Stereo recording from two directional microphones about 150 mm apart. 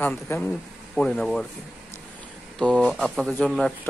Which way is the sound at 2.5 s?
5° left (ahead or behind).